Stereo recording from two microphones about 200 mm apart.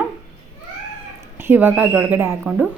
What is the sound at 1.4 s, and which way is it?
Speech, 10° right (ahead or behind).